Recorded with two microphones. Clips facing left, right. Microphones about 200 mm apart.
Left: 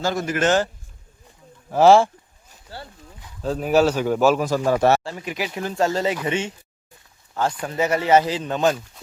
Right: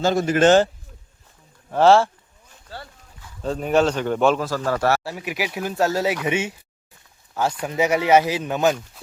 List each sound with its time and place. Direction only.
0.0 s speech: 25° right (ahead or behind)
1.7 s a man's voice: 10° left (ahead or behind)
2.6 s a sound: 15° left (ahead or behind)
3.4 s a man's voice: 5° left (ahead or behind)
4.4 s a man's voice: 15° left (ahead or behind)
5.0 s a man's voice: 10° right (ahead or behind)
7.6 s speech: 10° right (ahead or behind)